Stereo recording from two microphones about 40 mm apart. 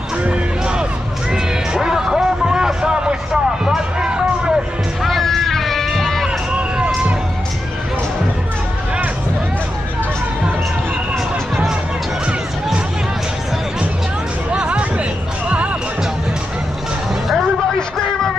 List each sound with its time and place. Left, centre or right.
0.2 s music: right
5.0 s a sound: centre
14.5 s music: right